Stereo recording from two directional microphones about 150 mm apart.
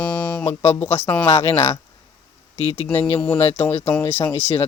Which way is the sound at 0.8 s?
15° left (ahead or behind).